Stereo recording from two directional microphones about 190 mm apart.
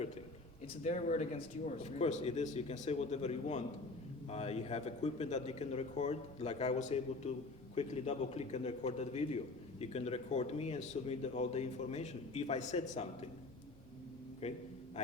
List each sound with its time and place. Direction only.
0.9 s speech: 35° left (ahead or behind)
14.4 s speech: 35° left (ahead or behind)